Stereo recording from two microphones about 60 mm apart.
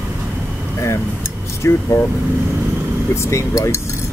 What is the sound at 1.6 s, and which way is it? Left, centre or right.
Speech, left.